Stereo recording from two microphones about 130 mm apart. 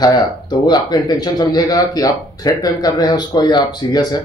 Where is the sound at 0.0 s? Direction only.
30° left (ahead or behind).